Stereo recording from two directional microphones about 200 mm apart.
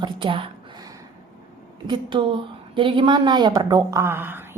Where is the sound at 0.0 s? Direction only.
25° right (ahead or behind).